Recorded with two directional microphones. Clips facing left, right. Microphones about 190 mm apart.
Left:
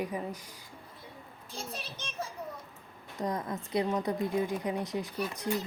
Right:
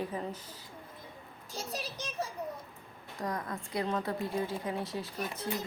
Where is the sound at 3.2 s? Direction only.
20° left (ahead or behind).